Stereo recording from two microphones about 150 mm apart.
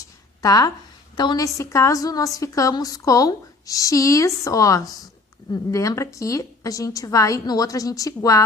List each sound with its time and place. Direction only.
0.4 s a woman's voice: 25° left (ahead or behind)